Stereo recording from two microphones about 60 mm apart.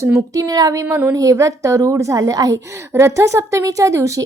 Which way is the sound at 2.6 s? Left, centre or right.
Right.